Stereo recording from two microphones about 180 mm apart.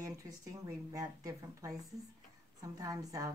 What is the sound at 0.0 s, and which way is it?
A woman's voice, 20° right (ahead or behind).